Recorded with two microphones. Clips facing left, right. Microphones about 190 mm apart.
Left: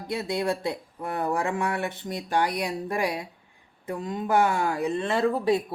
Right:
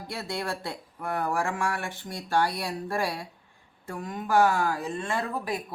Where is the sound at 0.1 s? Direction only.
20° left (ahead or behind).